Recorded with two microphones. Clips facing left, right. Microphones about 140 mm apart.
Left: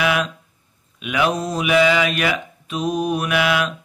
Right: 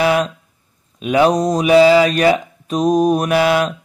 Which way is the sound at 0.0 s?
35° right (ahead or behind).